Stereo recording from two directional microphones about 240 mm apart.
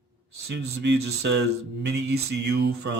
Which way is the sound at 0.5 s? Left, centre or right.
Right.